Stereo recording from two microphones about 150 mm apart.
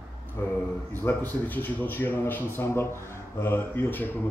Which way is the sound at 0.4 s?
15° left (ahead or behind).